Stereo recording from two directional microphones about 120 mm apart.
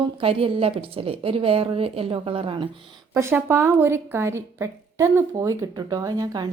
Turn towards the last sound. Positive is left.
turn(degrees=-35)  # may be behind; listen again after turning